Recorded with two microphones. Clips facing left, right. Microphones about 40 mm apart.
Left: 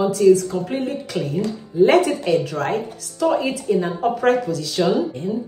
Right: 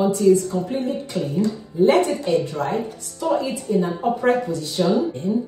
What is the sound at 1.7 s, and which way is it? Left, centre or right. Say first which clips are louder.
Speech: left 2 dB; left.